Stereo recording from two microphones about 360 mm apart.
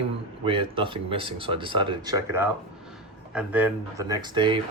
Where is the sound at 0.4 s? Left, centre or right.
Centre.